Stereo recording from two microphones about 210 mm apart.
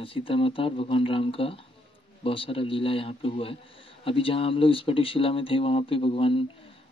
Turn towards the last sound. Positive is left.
turn(degrees=25)  # may be behind; listen again after turning